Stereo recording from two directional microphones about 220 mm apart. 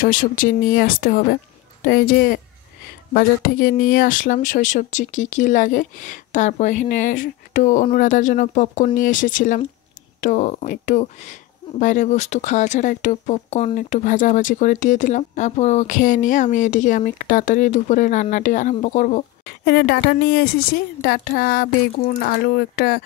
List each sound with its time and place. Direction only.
0.0 s a woman's voice: 40° left (ahead or behind)
19.6 s a woman's voice: 50° left (ahead or behind)